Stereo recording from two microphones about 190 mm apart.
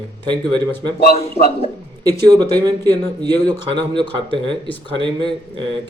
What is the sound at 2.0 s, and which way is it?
Speech, 20° right (ahead or behind).